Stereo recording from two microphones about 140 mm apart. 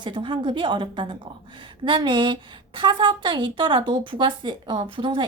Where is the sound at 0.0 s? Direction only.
35° right (ahead or behind).